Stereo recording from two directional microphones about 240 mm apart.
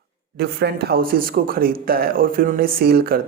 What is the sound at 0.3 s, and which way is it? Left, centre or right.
Speech, right.